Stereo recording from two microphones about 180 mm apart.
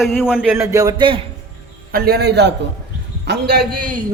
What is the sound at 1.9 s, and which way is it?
A man's voice, 60° right (ahead or behind).